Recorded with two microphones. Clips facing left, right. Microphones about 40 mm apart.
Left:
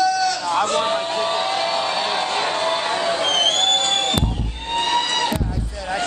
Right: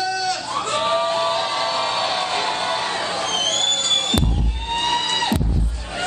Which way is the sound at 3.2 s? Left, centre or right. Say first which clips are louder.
Left 5 dB; left.